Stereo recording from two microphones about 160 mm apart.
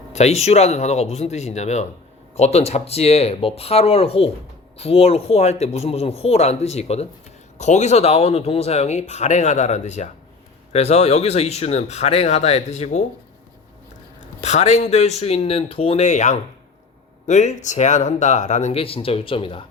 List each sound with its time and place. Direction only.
0.1 s speech: 45° left (ahead or behind)
14.4 s speech: 45° left (ahead or behind)